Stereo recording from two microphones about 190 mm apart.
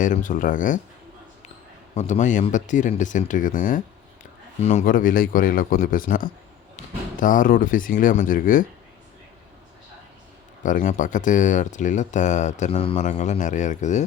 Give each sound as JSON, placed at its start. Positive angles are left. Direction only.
{"t": 0.0, "sound": "speech", "side_deg": 40}
{"t": 2.0, "sound": "speech", "side_deg": 40}
{"t": 10.6, "sound": "speech", "side_deg": 45}